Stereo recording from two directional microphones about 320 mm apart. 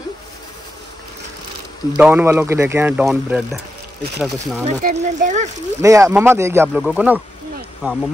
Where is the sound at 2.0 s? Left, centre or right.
Centre.